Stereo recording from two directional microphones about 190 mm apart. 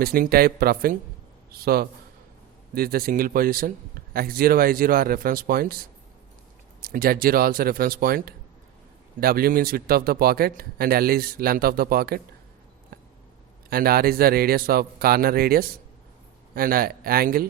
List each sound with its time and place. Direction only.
0.0 s a man's voice: 50° right (ahead or behind)
12.9 s a sound: 50° right (ahead or behind)
13.7 s a man's voice: 50° right (ahead or behind)